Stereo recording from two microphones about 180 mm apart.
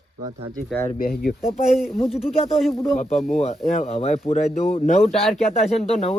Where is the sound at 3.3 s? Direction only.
40° left (ahead or behind).